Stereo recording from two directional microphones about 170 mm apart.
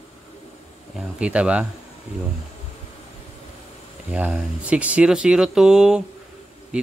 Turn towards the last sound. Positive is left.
turn(degrees=-5)  # may be behind; listen again after turning